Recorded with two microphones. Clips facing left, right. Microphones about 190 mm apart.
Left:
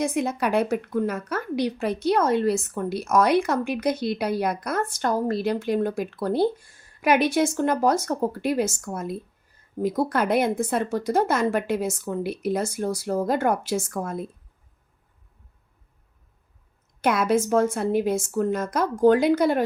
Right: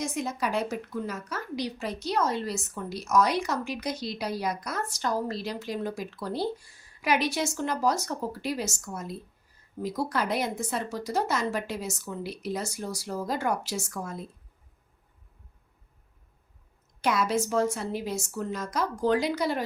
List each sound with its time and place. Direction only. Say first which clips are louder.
0.0 s a woman's voice: left 6 dB; 60° left (ahead or behind)
17.0 s speech: left 5 dB; 55° left (ahead or behind)